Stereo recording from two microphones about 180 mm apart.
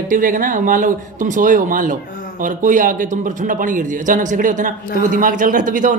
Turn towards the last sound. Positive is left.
turn(degrees=-45)  # may be behind; listen again after turning